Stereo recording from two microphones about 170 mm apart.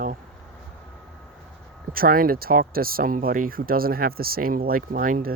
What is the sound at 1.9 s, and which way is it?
Speech, 60° right (ahead or behind).